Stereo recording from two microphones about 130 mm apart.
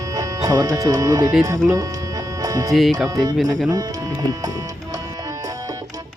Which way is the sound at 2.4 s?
30° right (ahead or behind).